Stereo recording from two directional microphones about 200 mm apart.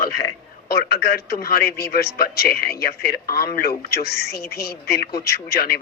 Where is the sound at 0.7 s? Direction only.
50° left (ahead or behind).